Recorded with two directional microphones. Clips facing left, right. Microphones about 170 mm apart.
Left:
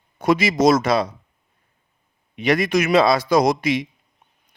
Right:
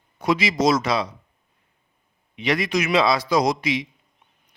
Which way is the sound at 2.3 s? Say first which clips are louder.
Left 4 dB; 45° left (ahead or behind).